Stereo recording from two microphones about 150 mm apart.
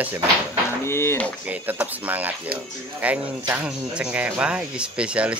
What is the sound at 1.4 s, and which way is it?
A man's voice, 10° right (ahead or behind).